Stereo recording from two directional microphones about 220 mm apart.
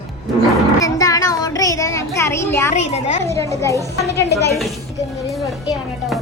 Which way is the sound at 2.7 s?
30° left (ahead or behind).